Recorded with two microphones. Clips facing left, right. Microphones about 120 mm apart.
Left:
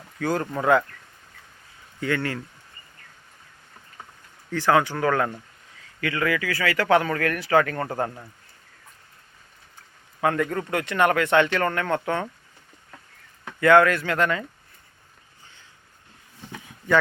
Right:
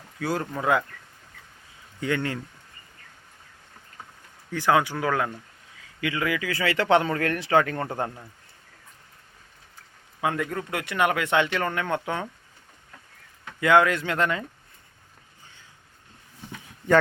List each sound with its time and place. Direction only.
0.2 s speech: 5° right (ahead or behind)
2.0 s a man's voice: 20° right (ahead or behind)
4.5 s a man's voice: 15° right (ahead or behind)
10.2 s speech: 10° right (ahead or behind)
13.6 s a man's voice: 15° right (ahead or behind)